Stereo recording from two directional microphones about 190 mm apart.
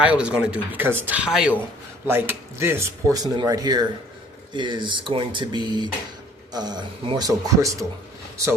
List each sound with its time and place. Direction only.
0.0 s speech: 5° right (ahead or behind)